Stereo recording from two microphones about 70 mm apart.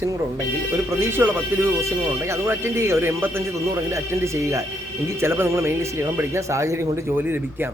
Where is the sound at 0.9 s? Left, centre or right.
Right.